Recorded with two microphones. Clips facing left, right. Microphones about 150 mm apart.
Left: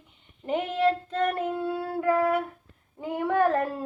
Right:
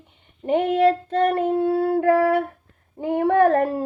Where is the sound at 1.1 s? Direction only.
30° right (ahead or behind).